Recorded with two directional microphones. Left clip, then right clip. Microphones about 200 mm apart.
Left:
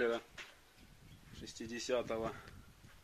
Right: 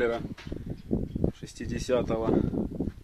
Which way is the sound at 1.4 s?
55° right (ahead or behind).